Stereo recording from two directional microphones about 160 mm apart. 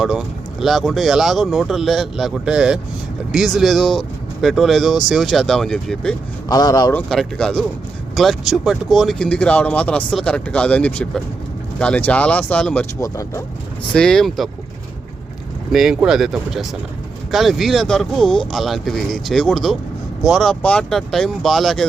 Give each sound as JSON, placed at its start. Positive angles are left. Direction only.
{"t": 0.0, "sound": "speech", "side_deg": -5}
{"t": 6.5, "sound": "speech", "side_deg": 25}
{"t": 6.9, "sound": "speech", "side_deg": 5}
{"t": 13.0, "sound": "speech", "side_deg": 20}
{"t": 13.9, "sound": "speech", "side_deg": 5}
{"t": 15.7, "sound": "speech", "side_deg": -5}